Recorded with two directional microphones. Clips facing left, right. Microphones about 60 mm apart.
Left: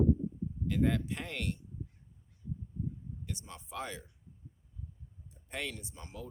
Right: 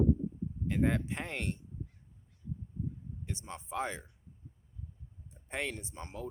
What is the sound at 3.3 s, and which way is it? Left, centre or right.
Speech, right.